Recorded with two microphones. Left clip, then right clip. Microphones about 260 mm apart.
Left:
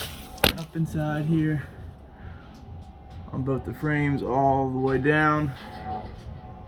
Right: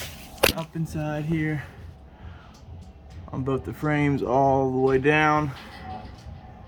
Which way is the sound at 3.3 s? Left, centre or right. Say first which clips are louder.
Right 1 dB; centre.